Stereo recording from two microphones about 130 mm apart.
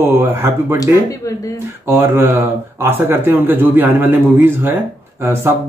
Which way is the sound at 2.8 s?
15° right (ahead or behind).